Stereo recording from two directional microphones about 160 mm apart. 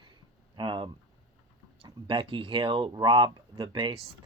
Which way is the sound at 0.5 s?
30° right (ahead or behind).